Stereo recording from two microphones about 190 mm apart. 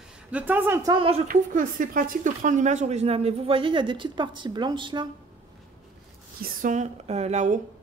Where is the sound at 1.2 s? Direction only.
45° right (ahead or behind); by 5.0 s 25° right (ahead or behind).